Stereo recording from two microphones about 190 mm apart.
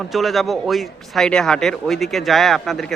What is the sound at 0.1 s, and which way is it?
A man's voice, centre (ahead or behind).